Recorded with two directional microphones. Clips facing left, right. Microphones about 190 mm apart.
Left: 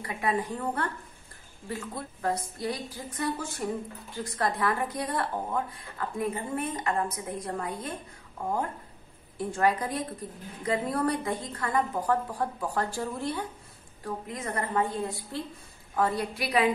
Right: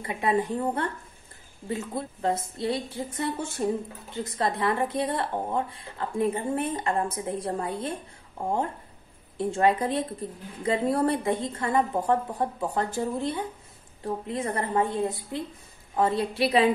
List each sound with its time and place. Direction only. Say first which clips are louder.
0.0 s speech: right 4 dB; 25° right (ahead or behind)